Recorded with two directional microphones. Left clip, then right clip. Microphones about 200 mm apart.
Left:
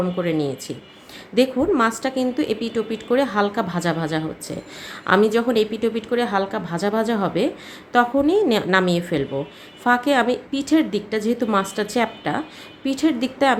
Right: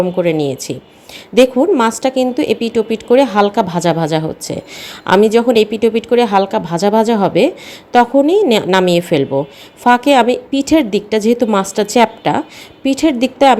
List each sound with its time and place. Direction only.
0.2 s a woman's voice: 30° right (ahead or behind)